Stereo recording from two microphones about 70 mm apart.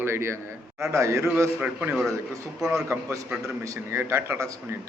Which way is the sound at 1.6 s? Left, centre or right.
Centre.